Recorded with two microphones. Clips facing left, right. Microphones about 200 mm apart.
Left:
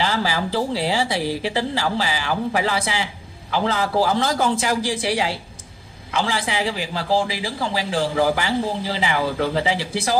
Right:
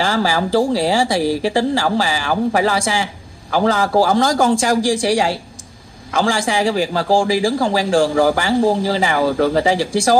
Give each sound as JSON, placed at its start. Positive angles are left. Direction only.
{"t": 0.0, "sound": "speech", "side_deg": -45}